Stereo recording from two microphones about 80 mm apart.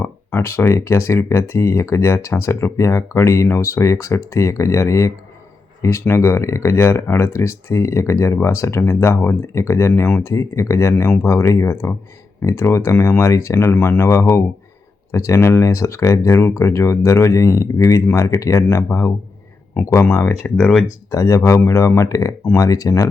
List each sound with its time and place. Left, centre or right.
0.0 s speech: left
20.6 s speech: centre
21.1 s speech: left